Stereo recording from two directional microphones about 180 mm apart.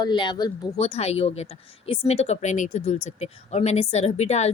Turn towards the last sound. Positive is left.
turn(degrees=35)  # may be behind; listen again after turning